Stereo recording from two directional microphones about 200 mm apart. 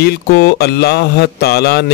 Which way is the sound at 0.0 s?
55° left (ahead or behind).